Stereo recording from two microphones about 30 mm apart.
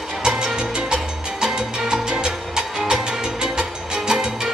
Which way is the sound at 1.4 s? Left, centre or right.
Right.